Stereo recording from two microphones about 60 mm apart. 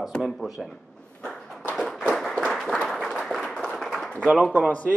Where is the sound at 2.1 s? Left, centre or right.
Centre.